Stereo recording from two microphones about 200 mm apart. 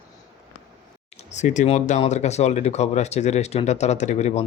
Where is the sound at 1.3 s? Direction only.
40° left (ahead or behind).